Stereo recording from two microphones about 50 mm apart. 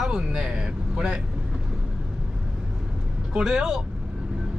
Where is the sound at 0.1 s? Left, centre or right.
Centre.